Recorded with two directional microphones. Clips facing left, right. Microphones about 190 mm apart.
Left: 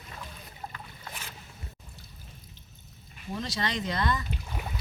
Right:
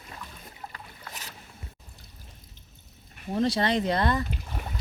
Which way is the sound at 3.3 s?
50° right (ahead or behind).